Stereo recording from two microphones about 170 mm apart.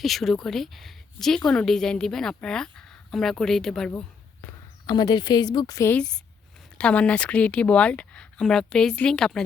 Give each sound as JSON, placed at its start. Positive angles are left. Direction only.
{"t": 0.0, "sound": "a woman's voice", "side_deg": 0}
{"t": 4.9, "sound": "a woman's voice", "side_deg": 25}
{"t": 5.9, "sound": "a woman's voice", "side_deg": 5}